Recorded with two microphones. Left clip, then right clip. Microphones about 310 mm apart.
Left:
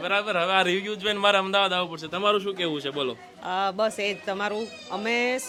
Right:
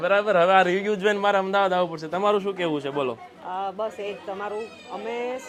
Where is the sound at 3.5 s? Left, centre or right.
Left.